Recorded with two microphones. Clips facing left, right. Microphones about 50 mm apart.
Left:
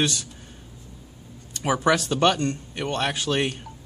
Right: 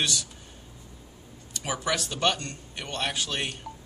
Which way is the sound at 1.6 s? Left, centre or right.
Left.